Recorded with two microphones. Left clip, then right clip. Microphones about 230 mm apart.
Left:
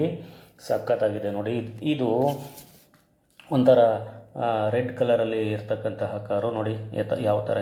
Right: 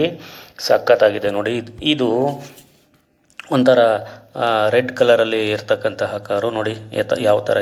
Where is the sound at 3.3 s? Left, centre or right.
Right.